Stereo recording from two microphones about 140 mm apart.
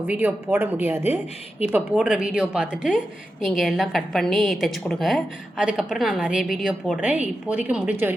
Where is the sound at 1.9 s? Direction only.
5° right (ahead or behind).